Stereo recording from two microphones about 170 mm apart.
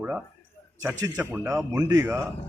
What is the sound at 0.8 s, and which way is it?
A man's voice, 20° right (ahead or behind).